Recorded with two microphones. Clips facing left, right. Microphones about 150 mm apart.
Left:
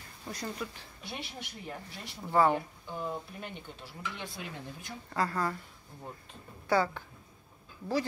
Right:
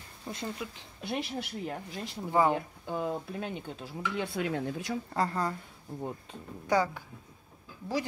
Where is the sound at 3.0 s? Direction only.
90° right.